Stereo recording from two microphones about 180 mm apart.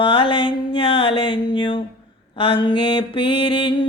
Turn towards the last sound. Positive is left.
turn(degrees=30)  # may be behind; listen again after turning